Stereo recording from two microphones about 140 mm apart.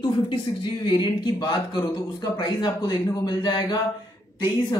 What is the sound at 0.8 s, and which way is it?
A man's voice, 35° left (ahead or behind).